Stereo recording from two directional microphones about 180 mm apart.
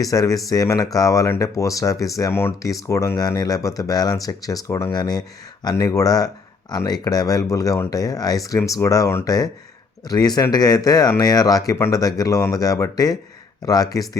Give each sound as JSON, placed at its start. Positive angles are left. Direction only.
{"t": 0.0, "sound": "speech", "side_deg": 20}